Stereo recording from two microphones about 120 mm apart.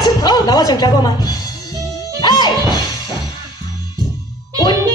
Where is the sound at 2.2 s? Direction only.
35° left (ahead or behind).